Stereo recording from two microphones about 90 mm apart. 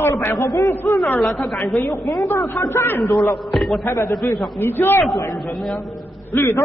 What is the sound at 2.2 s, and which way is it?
Speech, 35° left (ahead or behind).